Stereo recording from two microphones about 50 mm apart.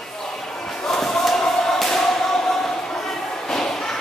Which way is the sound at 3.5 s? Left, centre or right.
Centre.